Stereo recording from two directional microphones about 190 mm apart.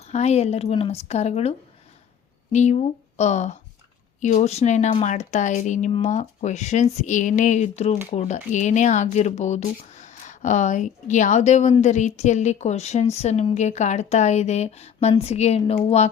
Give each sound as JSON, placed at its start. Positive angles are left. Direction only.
{"t": 0.0, "sound": "a woman's voice", "side_deg": 35}